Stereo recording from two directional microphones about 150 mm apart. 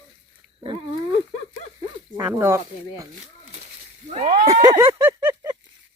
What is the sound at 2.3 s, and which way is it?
Speech, 20° right (ahead or behind).